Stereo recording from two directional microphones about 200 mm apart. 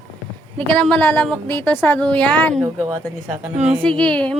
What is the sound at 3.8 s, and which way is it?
Speech, 5° left (ahead or behind).